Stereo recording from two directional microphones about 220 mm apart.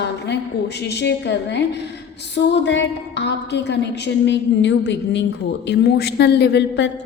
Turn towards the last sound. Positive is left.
turn(degrees=55)  # may be behind; listen again after turning